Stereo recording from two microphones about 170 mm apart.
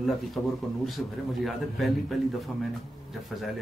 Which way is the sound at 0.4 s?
5° left (ahead or behind).